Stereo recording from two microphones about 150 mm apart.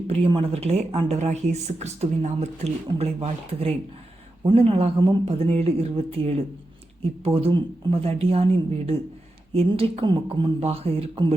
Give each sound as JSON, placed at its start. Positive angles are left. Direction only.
{"t": 0.1, "sound": "speech", "side_deg": -35}
{"t": 9.5, "sound": "speech", "side_deg": -40}